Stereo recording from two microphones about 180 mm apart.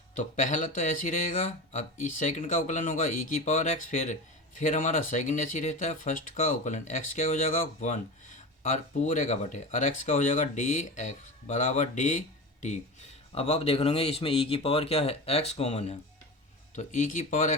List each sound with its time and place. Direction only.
0.2 s speech: 45° left (ahead or behind)